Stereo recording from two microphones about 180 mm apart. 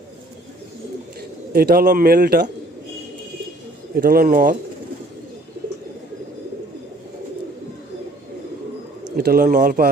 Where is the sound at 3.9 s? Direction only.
55° right (ahead or behind).